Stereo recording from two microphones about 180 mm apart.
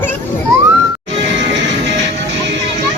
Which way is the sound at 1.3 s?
85° right.